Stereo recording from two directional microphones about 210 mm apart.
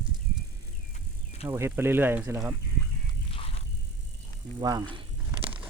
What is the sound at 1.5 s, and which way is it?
Speech, 10° right (ahead or behind).